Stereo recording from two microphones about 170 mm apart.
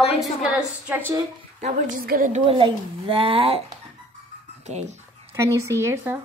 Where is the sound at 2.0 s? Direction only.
50° right (ahead or behind).